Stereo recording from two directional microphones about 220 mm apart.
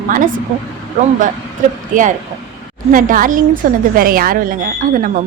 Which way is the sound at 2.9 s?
40° right (ahead or behind).